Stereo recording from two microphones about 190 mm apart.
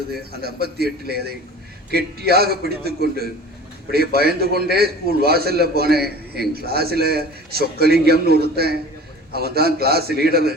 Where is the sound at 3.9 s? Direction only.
55° right (ahead or behind).